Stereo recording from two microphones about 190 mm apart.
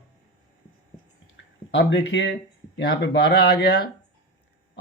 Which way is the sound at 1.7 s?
65° left (ahead or behind).